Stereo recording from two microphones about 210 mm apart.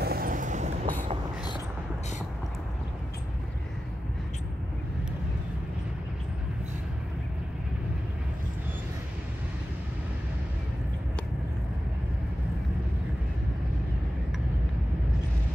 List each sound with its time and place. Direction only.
0.0 s vehicle: 45° right (ahead or behind)